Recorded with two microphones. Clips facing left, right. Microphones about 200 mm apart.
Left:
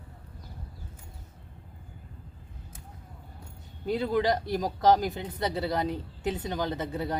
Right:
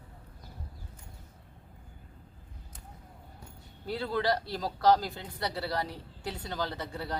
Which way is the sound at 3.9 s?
15° left (ahead or behind).